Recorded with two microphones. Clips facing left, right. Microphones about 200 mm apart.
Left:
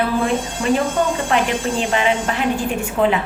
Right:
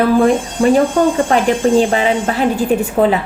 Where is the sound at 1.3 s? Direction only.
40° right (ahead or behind).